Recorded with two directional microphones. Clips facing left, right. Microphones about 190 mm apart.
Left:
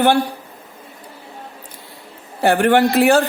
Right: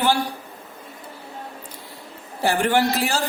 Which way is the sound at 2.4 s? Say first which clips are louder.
Left 6 dB; 60° left (ahead or behind).